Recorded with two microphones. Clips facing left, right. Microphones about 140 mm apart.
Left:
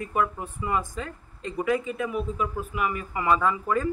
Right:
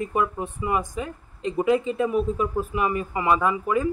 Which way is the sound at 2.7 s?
25° right (ahead or behind).